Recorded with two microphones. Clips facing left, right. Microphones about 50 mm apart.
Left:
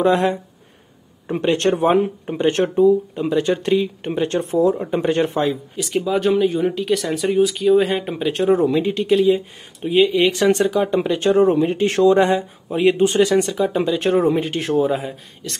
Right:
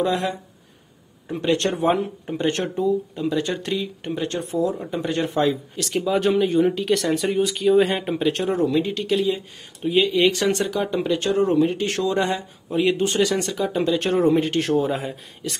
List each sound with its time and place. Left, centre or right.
0.0 s speech: left
2.2 s speech: centre
5.4 s speech: centre
11.0 s speech: centre